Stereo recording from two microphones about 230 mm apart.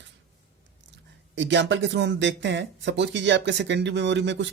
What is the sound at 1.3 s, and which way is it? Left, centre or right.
Speech, right.